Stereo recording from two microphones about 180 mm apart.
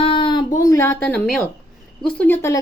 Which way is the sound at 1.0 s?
5° left (ahead or behind).